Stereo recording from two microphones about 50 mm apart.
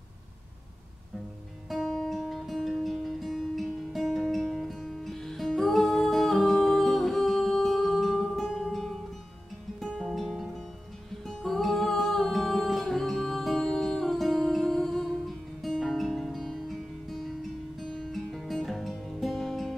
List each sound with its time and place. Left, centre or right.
1.9 s music: centre